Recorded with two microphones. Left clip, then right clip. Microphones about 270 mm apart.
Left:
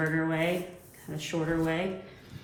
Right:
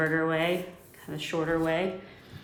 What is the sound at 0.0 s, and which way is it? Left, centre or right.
A woman's voice, right.